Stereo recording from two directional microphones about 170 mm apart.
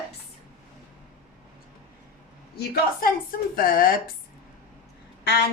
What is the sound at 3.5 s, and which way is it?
Speech, 60° left (ahead or behind).